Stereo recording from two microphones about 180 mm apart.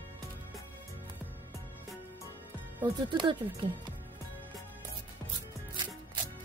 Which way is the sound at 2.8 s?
25° right (ahead or behind).